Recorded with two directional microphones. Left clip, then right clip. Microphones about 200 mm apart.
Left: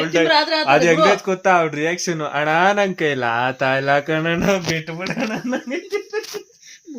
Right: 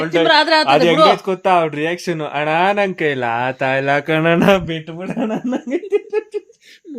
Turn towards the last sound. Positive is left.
turn(degrees=-15)  # may be behind; listen again after turning